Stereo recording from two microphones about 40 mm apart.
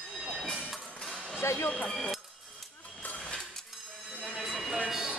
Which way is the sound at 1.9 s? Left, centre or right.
Centre.